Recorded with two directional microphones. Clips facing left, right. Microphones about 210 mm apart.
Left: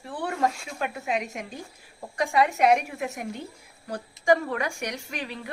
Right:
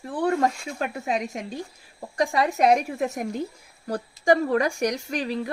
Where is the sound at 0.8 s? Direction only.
35° right (ahead or behind).